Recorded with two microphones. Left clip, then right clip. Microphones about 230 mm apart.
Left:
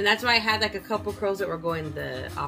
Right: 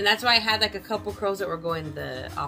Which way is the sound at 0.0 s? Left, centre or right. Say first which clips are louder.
Right 1 dB; centre.